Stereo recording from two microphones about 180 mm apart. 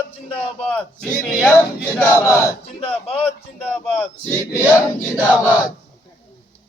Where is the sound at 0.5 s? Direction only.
5° left (ahead or behind).